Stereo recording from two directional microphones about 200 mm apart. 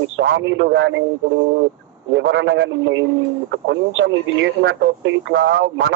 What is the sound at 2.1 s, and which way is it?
A man's voice, 70° right (ahead or behind).